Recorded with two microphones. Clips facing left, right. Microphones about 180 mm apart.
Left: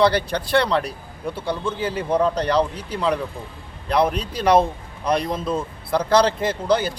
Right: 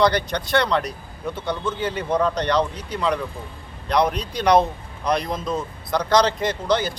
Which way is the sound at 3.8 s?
5° left (ahead or behind).